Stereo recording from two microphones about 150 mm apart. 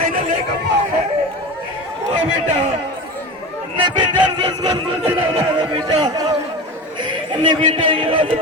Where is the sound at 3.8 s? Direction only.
30° right (ahead or behind).